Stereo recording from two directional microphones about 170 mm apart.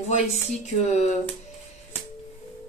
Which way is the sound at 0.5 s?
40° left (ahead or behind).